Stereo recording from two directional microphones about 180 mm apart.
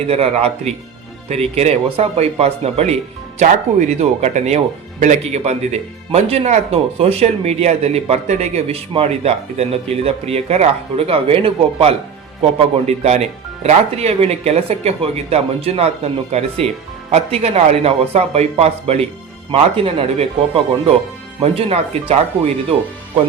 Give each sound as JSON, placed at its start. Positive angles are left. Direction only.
{"t": 0.1, "sound": "speech", "side_deg": -35}
{"t": 17.1, "sound": "speech", "side_deg": -35}